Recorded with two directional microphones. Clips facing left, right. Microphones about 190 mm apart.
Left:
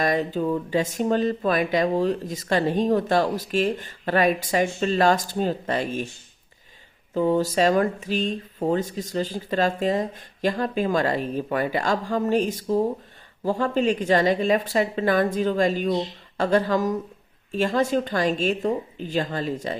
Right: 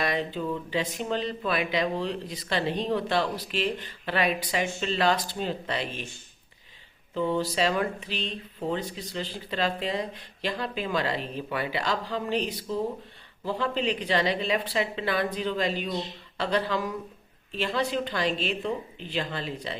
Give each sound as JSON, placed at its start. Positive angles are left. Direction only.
{"t": 0.0, "sound": "speech", "side_deg": 45}
{"t": 7.1, "sound": "speech", "side_deg": 45}